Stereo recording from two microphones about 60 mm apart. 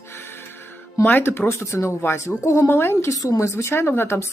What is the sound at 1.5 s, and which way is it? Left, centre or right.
Speech, left.